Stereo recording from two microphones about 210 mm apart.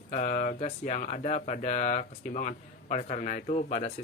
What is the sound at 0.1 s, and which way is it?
Speech, 35° left (ahead or behind).